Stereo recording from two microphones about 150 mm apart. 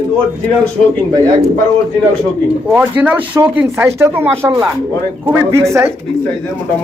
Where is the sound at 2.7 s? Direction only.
10° right (ahead or behind).